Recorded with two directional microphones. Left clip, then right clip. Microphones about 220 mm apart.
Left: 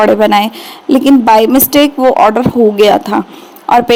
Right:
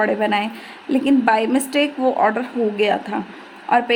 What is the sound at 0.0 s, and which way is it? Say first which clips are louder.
A woman's voice: left 11 dB; 30° left (ahead or behind).